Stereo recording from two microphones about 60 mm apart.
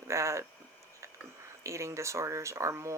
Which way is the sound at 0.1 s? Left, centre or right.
Right.